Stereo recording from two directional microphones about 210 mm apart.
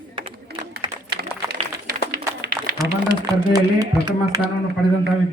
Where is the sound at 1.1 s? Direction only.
45° right (ahead or behind).